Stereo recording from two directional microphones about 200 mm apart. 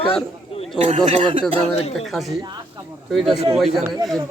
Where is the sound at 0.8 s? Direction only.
30° right (ahead or behind).